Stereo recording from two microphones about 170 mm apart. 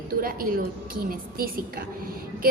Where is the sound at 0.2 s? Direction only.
55° right (ahead or behind).